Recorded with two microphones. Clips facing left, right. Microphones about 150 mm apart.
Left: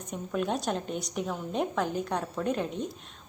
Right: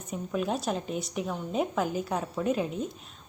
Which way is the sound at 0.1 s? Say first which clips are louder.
Even; centre (ahead or behind).